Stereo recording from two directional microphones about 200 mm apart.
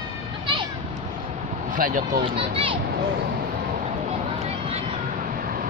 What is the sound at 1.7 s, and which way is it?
Vehicle, 40° right (ahead or behind).